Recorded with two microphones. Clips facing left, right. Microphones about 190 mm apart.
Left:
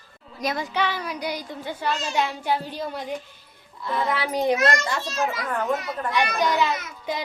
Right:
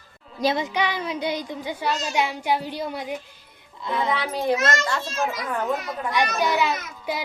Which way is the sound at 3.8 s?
15° right (ahead or behind).